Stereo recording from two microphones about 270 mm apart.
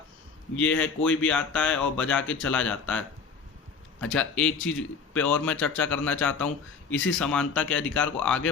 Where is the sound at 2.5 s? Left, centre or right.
Centre.